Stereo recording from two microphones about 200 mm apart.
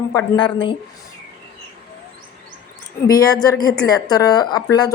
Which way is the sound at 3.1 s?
20° left (ahead or behind).